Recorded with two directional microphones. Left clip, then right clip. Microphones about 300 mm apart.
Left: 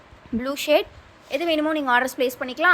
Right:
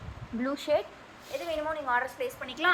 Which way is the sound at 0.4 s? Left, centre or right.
Left.